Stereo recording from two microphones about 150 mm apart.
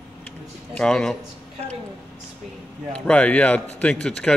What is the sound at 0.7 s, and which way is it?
Speech, 5° left (ahead or behind).